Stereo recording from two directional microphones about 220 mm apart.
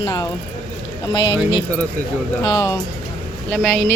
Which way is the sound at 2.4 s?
20° left (ahead or behind).